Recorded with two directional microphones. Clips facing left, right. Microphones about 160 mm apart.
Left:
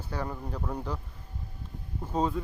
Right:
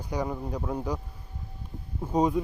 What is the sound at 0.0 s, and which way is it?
Speech, 15° right (ahead or behind).